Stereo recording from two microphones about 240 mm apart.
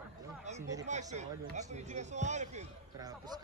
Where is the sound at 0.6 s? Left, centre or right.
Centre.